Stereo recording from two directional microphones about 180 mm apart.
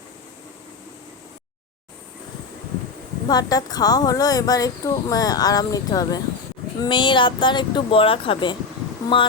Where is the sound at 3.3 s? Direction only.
20° left (ahead or behind).